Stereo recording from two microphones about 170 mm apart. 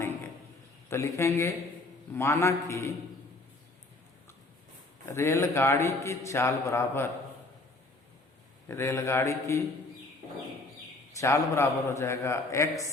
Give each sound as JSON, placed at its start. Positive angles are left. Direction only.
{"t": 0.9, "sound": "a man's voice", "side_deg": 15}
{"t": 5.1, "sound": "a man's voice", "side_deg": 15}
{"t": 8.6, "sound": "a man's voice", "side_deg": 15}
{"t": 11.2, "sound": "a man's voice", "side_deg": 15}